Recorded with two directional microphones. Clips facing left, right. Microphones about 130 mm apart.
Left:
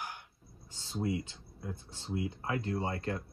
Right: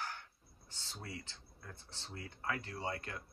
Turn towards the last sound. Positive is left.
turn(degrees=30)  # may be behind; listen again after turning